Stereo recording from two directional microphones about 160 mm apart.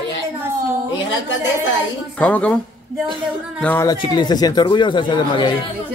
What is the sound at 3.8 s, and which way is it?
Speech, 25° left (ahead or behind).